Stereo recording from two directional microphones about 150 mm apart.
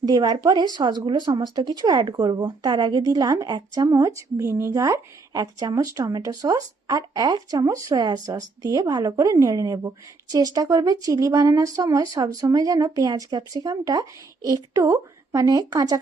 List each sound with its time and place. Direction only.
0.0 s speech: 30° right (ahead or behind)